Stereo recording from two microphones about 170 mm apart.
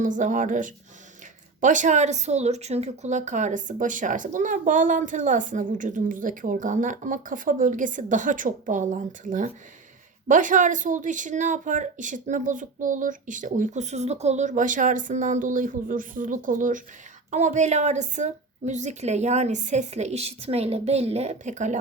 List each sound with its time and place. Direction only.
0.0 s speech: 50° right (ahead or behind)